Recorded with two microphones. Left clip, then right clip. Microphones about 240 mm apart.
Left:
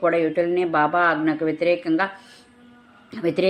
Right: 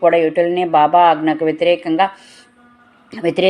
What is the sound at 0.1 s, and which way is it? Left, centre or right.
Speech, centre.